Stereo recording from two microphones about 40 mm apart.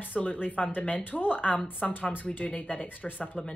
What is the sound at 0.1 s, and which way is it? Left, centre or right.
Speech, left.